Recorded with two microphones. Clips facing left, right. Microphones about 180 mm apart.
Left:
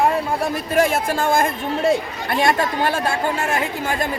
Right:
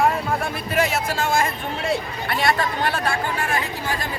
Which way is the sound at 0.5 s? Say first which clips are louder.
Left 7 dB; 45° left (ahead or behind).